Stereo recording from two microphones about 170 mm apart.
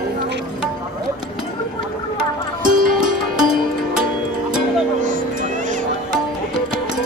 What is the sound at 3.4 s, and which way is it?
Music, 5° right (ahead or behind).